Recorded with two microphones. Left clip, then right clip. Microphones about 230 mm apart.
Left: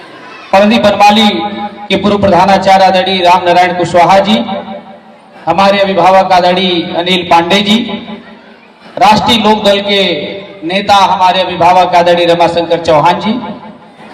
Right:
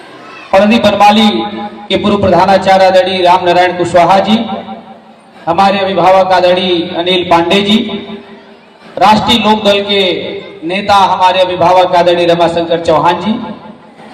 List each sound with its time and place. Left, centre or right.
0.6 s a man's voice: left
5.5 s a man's voice: left
9.0 s a man's voice: left